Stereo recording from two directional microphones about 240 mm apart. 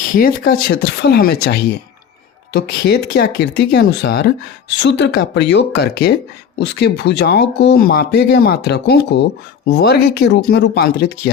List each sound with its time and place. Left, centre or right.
0.0 s speech: left